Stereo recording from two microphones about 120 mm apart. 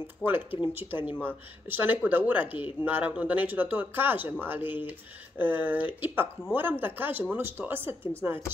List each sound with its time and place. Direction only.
0.2 s speech: 15° right (ahead or behind)